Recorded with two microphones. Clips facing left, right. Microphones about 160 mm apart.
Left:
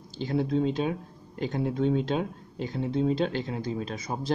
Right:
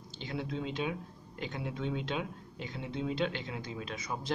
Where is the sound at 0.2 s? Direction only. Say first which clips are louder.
Left 11 dB; 40° left (ahead or behind).